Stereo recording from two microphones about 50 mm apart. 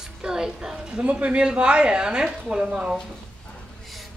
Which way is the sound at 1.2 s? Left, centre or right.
Right.